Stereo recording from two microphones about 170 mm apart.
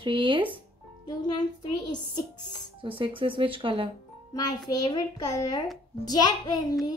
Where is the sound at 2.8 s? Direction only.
30° right (ahead or behind).